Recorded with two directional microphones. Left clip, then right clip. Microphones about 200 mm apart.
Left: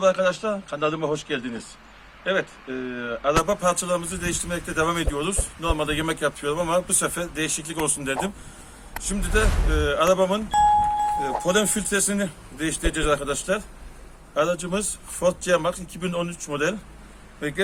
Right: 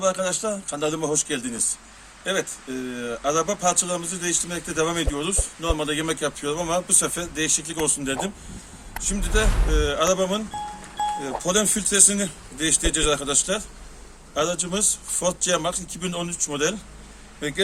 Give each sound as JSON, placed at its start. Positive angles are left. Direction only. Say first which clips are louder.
{"t": 0.0, "sound": "a man's voice", "louder": "left 3 dB", "side_deg": 0}